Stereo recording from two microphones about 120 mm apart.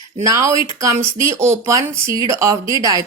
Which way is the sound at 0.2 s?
25° right (ahead or behind).